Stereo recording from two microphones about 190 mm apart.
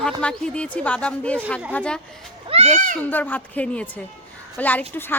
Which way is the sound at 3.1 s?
10° left (ahead or behind).